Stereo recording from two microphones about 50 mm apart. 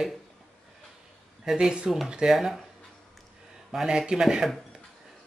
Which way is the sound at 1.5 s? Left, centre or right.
Centre.